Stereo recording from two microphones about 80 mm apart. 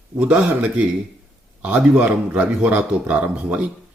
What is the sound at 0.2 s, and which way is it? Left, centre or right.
Speech, centre.